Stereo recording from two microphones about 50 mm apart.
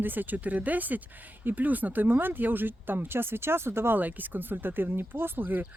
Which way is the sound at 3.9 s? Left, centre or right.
Right.